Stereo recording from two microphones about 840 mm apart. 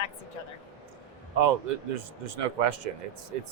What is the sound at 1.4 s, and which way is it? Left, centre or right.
Speech, right.